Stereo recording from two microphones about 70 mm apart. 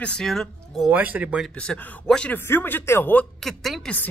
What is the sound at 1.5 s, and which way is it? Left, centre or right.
Speech, centre.